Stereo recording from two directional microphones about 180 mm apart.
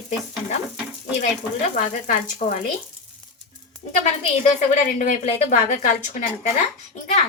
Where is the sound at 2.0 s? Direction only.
45° left (ahead or behind).